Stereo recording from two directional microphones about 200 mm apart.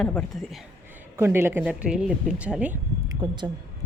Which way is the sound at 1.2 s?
10° right (ahead or behind).